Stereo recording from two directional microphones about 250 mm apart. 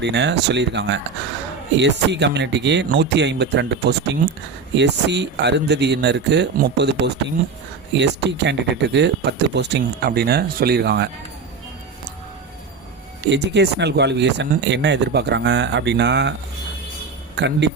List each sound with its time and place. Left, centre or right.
0.0 s speech: right
13.3 s speech: right
17.3 s speech: right